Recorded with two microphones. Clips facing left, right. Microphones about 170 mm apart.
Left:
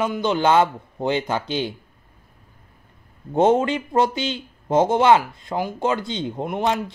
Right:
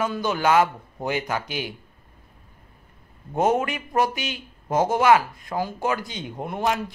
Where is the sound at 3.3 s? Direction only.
25° left (ahead or behind).